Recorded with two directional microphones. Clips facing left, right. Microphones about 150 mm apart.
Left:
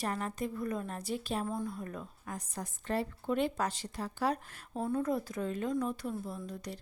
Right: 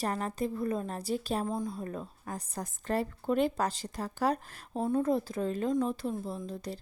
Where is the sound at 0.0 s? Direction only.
35° right (ahead or behind).